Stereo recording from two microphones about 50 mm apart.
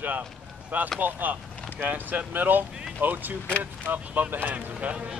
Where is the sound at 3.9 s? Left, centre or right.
Right.